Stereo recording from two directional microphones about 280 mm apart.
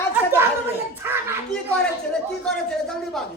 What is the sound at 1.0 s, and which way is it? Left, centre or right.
Speech, centre.